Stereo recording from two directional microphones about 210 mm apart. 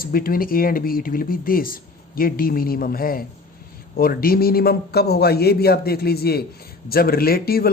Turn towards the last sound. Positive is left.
turn(degrees=45)  # may be behind; listen again after turning